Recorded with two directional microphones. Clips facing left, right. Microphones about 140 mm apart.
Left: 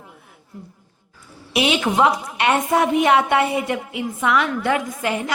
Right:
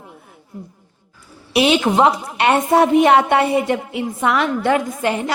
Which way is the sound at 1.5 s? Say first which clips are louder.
Right 4 dB; 35° right (ahead or behind).